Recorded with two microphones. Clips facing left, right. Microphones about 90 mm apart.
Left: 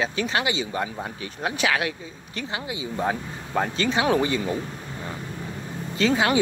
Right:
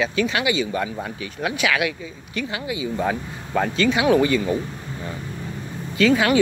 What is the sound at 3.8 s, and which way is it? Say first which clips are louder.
Speech: right 5 dB; 30° left (ahead or behind).